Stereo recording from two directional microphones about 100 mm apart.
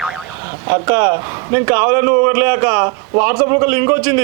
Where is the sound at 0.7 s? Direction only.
25° right (ahead or behind).